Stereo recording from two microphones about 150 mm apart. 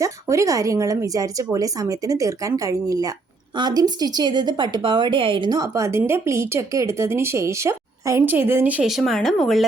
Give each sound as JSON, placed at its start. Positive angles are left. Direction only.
{"t": 0.0, "sound": "a woman's voice", "side_deg": -20}